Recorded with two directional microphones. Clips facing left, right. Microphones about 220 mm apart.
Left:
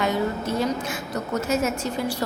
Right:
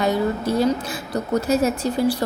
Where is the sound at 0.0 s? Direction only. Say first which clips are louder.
Right 3 dB; 35° right (ahead or behind).